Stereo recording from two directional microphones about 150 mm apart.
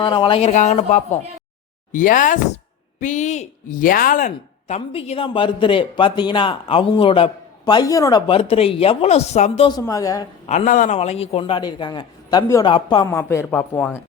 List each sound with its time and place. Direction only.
0.0 s speech: 35° left (ahead or behind); by 1.2 s 50° left (ahead or behind)
1.9 s a woman's voice: 60° left (ahead or behind)
4.7 s speech: 40° left (ahead or behind); by 8.2 s 25° left (ahead or behind)
8.3 s speech: 40° left (ahead or behind)
9.8 s a woman's voice: 25° left (ahead or behind)
10.4 s speech: 40° left (ahead or behind)
10.7 s speech: 55° left (ahead or behind); by 13.1 s 30° left (ahead or behind)
13.1 s speech: 15° left (ahead or behind)
13.5 s speech: 5° left (ahead or behind)